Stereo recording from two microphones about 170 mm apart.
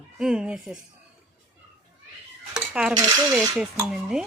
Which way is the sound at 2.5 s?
5° right (ahead or behind).